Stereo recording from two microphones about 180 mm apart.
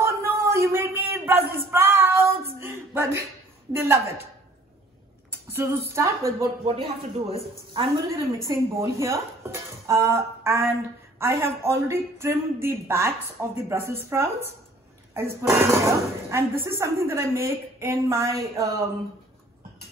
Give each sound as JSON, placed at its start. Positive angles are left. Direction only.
{"t": 0.0, "sound": "a sound", "side_deg": -15}
{"t": 3.7, "sound": "speech", "side_deg": -15}
{"t": 5.5, "sound": "speech", "side_deg": -15}
{"t": 6.6, "sound": "speech", "side_deg": -30}
{"t": 8.5, "sound": "speech", "side_deg": -15}